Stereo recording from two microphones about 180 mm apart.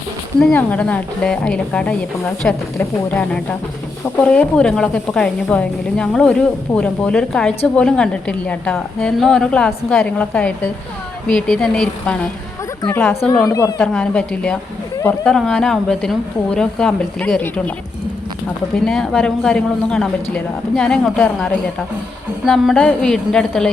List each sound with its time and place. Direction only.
0.3 s a woman's voice: 5° left (ahead or behind)
13.7 s a woman's voice: 5° left (ahead or behind)
18.9 s a woman's voice: centre (ahead or behind)